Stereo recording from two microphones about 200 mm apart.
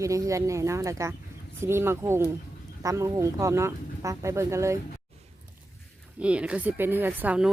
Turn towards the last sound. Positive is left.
turn(degrees=-5)  # may be behind; listen again after turning